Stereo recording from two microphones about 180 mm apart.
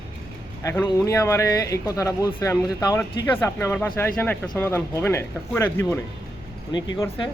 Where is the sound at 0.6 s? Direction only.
15° left (ahead or behind).